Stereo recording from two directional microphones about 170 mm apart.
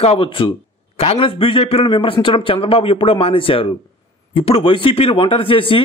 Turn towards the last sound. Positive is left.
turn(degrees=30)  # may be behind; listen again after turning